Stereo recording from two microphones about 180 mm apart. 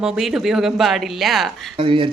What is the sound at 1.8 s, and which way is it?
Speech, 30° right (ahead or behind).